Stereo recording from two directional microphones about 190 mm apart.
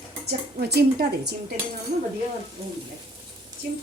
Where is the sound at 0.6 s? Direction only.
55° right (ahead or behind).